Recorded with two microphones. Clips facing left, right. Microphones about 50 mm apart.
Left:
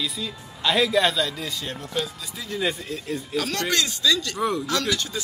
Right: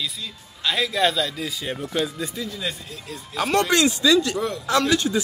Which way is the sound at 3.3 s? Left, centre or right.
Right.